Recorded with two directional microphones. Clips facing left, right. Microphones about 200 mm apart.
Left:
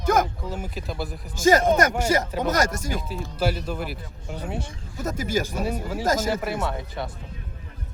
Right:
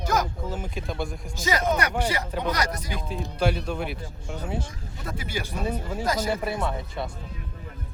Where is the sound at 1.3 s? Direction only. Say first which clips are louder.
Left 7 dB; 45° left (ahead or behind).